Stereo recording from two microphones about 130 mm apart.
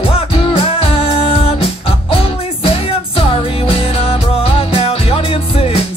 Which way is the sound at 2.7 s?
45° left (ahead or behind).